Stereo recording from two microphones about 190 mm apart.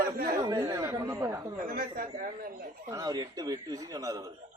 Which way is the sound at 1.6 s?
45° right (ahead or behind).